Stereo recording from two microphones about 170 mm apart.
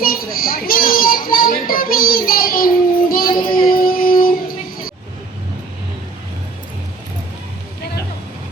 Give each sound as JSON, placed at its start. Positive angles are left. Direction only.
{"t": 0.0, "sound": "music", "side_deg": 60}
{"t": 3.1, "sound": "child singing", "side_deg": 60}
{"t": 3.5, "sound": "music", "side_deg": 60}